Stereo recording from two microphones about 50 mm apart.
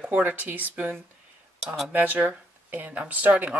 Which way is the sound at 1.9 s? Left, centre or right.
Right.